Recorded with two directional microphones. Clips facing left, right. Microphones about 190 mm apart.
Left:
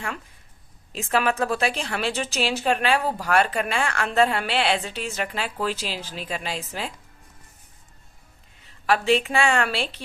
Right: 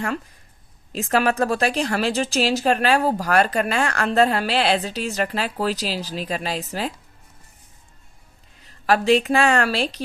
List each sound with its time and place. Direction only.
0.9 s speech: 35° right (ahead or behind)
8.6 s a woman's voice: 40° right (ahead or behind)